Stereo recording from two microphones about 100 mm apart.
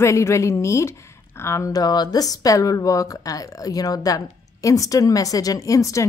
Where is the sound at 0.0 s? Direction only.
30° left (ahead or behind).